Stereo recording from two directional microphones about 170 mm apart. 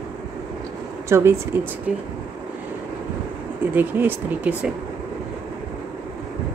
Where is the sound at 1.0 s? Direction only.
15° right (ahead or behind).